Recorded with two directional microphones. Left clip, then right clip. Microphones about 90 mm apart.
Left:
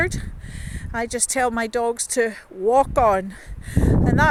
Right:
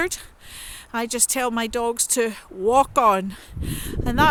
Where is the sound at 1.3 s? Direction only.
35° right (ahead or behind).